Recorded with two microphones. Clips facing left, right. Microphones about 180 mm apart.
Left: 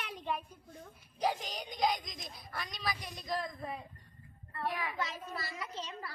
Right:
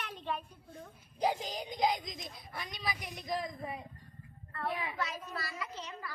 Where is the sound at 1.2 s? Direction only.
20° right (ahead or behind).